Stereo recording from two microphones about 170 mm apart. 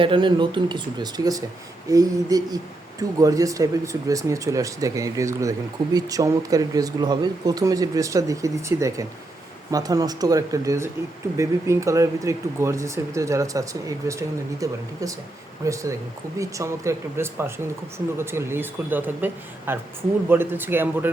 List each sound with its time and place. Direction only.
0.0 s speech: 30° right (ahead or behind); by 21.1 s 10° right (ahead or behind)